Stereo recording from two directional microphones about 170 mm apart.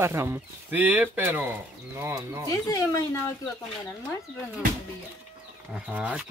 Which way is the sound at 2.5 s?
20° left (ahead or behind).